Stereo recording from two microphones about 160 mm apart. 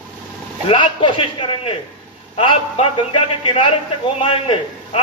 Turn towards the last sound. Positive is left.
turn(degrees=35)  # may be behind; listen again after turning